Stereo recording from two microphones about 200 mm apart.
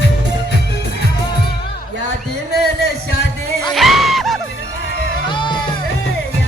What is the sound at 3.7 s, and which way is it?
Music, centre (ahead or behind).